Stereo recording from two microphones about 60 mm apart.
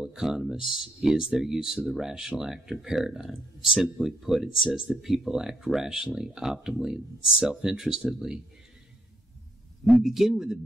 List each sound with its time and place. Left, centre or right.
0.0 s speech: centre
4.6 s speech: centre
9.8 s speech: centre